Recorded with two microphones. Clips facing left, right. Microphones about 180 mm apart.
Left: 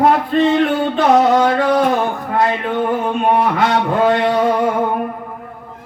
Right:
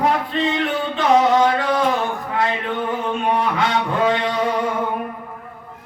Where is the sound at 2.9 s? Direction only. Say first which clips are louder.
Left 5 dB; 50° left (ahead or behind).